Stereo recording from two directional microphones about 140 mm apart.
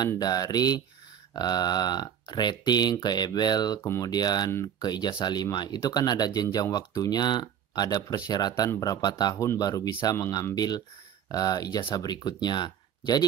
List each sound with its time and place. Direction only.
0.2 s speech: 30° left (ahead or behind)
3.8 s speech: 15° left (ahead or behind)
4.1 s speech: 30° left (ahead or behind)